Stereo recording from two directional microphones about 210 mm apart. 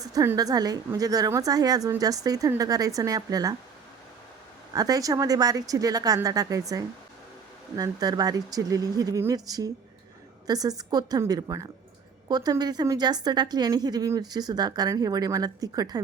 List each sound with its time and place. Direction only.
0.0 s a woman's voice: 15° right (ahead or behind)
4.7 s a woman's voice: 15° right (ahead or behind)